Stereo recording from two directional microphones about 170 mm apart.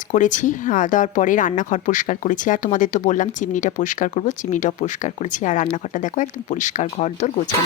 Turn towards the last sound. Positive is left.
turn(degrees=45)  # may be behind; listen again after turning